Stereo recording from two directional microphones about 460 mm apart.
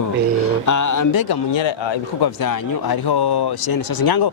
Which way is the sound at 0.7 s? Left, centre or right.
Left.